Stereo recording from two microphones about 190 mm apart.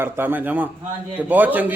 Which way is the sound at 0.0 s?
10° right (ahead or behind).